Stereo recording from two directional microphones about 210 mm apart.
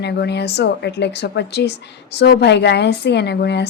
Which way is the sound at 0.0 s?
50° left (ahead or behind).